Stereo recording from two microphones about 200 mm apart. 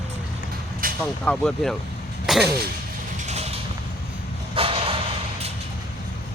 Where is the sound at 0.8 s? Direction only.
45° right (ahead or behind).